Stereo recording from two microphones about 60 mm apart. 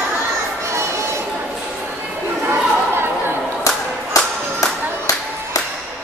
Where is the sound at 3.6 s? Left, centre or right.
Left.